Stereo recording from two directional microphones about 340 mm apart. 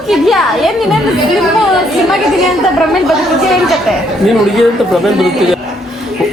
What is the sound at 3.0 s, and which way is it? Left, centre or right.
A woman's voice, centre.